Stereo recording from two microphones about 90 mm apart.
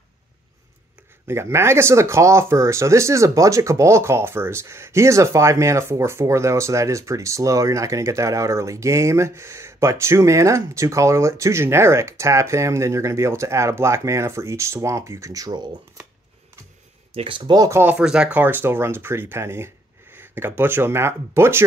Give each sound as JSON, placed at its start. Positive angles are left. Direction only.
{"t": 1.2, "sound": "speech", "side_deg": -30}
{"t": 17.1, "sound": "speech", "side_deg": -80}
{"t": 17.6, "sound": "speech", "side_deg": -25}
{"t": 17.9, "sound": "speech", "side_deg": -10}
{"t": 18.4, "sound": "speech", "side_deg": -25}